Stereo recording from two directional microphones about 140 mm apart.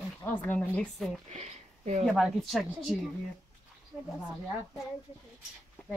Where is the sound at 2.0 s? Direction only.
Centre (ahead or behind).